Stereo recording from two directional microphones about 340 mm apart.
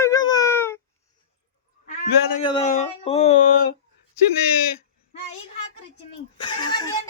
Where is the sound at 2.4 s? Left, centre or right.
Centre.